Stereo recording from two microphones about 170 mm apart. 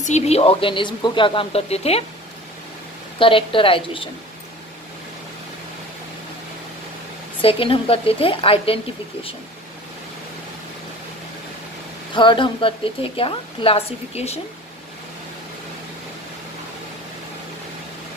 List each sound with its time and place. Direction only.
0.0 s a woman's voice: 40° left (ahead or behind)
3.2 s a woman's voice: 30° left (ahead or behind)
7.4 s a woman's voice: 35° left (ahead or behind)
12.1 s a woman's voice: 30° left (ahead or behind)